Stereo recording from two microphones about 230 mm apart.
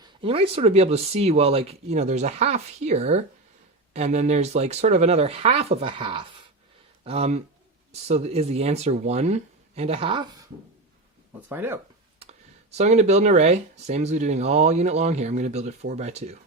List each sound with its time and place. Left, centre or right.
0.0 s speech: right
11.4 s speech: centre
12.7 s speech: right